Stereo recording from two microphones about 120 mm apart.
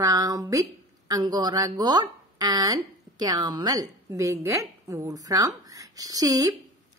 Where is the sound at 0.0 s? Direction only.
30° right (ahead or behind).